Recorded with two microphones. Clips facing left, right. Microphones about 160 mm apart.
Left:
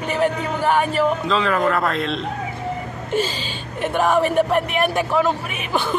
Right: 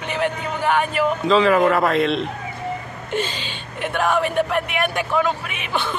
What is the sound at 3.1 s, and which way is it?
Speech, 35° left (ahead or behind).